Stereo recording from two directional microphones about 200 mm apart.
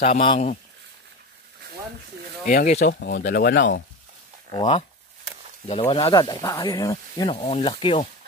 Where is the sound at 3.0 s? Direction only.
50° left (ahead or behind).